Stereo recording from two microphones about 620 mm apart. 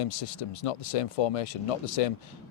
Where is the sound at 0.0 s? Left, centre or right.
Left.